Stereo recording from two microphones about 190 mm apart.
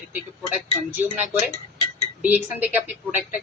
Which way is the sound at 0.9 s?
10° right (ahead or behind).